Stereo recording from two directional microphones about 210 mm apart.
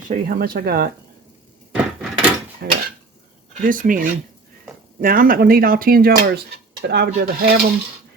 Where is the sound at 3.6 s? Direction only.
40° right (ahead or behind).